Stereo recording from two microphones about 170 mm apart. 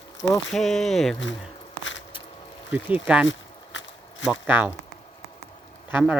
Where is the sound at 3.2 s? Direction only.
90° left.